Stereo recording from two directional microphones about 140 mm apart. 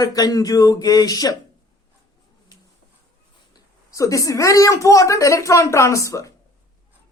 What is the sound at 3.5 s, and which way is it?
A woman's voice, 25° left (ahead or behind).